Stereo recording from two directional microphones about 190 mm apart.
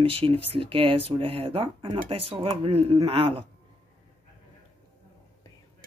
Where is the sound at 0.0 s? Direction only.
30° right (ahead or behind).